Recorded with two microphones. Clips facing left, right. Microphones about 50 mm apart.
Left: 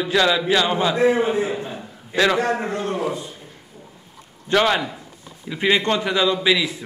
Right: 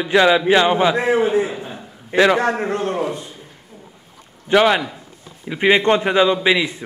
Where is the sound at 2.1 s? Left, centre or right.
Right.